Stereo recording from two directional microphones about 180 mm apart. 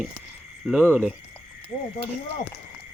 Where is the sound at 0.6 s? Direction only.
5° left (ahead or behind).